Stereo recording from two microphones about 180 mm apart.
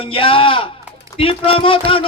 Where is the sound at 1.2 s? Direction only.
30° left (ahead or behind).